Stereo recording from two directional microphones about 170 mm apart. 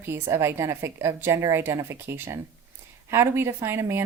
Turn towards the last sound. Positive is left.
turn(degrees=-15)  # may be behind; listen again after turning